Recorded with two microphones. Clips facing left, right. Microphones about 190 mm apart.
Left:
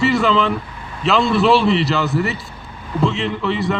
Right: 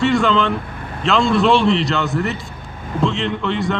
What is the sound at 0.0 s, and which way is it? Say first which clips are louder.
Vehicle: even; centre (ahead or behind).